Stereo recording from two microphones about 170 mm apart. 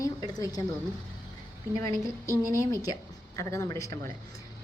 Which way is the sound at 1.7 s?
20° left (ahead or behind).